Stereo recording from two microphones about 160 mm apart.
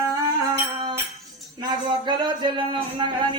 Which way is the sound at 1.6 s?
30° right (ahead or behind).